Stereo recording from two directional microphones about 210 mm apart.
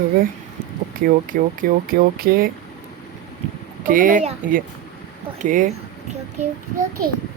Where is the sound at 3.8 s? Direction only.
40° right (ahead or behind).